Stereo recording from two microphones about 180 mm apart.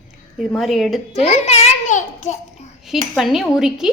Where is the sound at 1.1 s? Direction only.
35° left (ahead or behind).